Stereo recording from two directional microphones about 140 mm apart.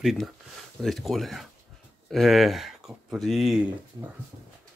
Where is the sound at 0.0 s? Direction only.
Centre (ahead or behind).